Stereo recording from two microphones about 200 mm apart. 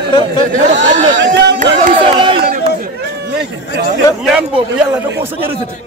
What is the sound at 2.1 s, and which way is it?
Speech, 25° right (ahead or behind).